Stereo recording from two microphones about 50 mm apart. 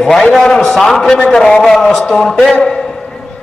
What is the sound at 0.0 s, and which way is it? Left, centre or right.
A man's voice, centre.